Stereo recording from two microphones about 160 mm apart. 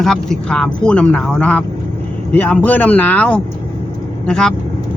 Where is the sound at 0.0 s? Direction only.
5° left (ahead or behind).